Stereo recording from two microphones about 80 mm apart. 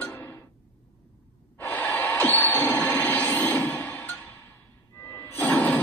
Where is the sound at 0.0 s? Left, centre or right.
Left.